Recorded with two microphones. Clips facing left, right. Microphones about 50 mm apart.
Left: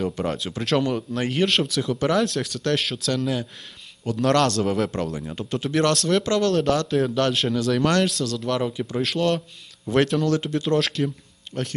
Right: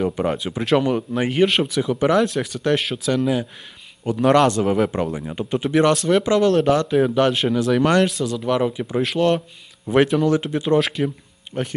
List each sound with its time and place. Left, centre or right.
0.0 s a man's voice: centre